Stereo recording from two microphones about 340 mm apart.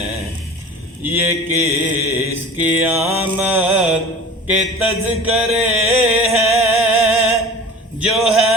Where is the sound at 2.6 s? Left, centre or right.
Centre.